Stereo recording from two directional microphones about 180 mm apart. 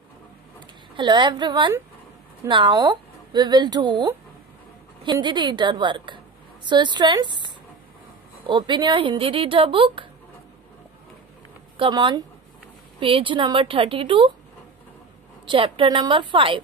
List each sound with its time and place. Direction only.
0.9 s speech: 25° right (ahead or behind)
8.5 s speech: 25° right (ahead or behind)
11.7 s speech: 25° right (ahead or behind)
15.4 s speech: 30° right (ahead or behind)